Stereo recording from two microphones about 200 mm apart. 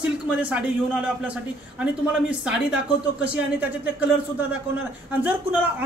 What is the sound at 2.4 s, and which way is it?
Speech, 5° right (ahead or behind).